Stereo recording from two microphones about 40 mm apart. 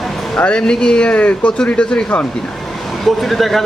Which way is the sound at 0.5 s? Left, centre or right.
Left.